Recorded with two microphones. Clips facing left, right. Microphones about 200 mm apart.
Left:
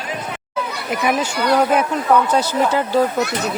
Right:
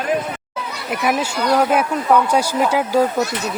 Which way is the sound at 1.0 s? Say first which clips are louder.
Even; 5° right (ahead or behind).